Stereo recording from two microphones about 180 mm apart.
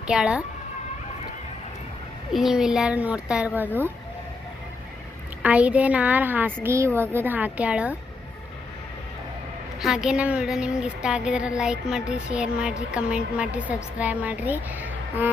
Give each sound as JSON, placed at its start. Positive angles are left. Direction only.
{"t": 0.1, "sound": "speech", "side_deg": -5}
{"t": 2.3, "sound": "speech", "side_deg": 0}
{"t": 5.4, "sound": "a woman's voice", "side_deg": -5}
{"t": 9.8, "sound": "a woman's voice", "side_deg": -5}